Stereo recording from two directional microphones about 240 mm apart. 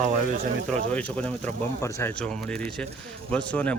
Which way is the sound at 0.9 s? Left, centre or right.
Centre.